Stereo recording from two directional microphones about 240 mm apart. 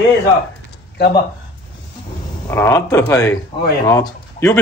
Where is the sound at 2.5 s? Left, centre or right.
Centre.